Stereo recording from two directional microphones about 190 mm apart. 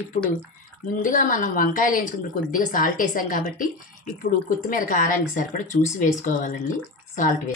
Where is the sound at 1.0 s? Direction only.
45° left (ahead or behind).